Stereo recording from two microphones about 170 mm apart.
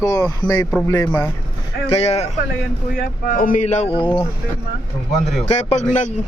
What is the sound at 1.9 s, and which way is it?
Speech, 40° left (ahead or behind).